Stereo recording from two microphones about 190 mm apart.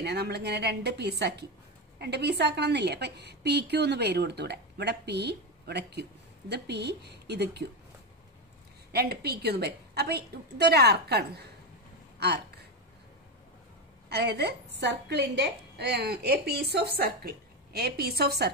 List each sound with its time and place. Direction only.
0.0 s a woman's voice: 60° right (ahead or behind)
8.9 s a woman's voice: 55° right (ahead or behind)
14.0 s a woman's voice: 60° right (ahead or behind)